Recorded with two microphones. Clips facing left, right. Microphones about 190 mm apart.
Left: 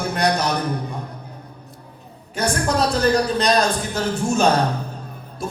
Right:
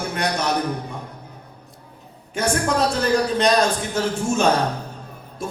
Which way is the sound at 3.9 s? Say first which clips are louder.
Even; 35° left (ahead or behind).